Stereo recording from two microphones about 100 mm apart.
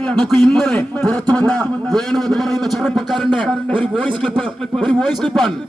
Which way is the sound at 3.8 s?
15° left (ahead or behind).